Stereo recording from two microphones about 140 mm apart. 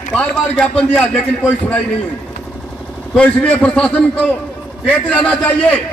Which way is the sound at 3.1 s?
10° left (ahead or behind).